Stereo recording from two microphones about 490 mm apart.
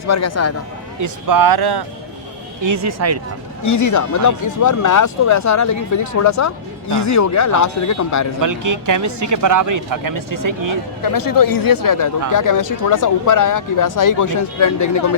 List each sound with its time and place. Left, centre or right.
0.1 s speech: left
1.0 s speech: right
2.6 s speech: right
3.6 s speech: left
8.4 s speech: right
11.0 s speech: left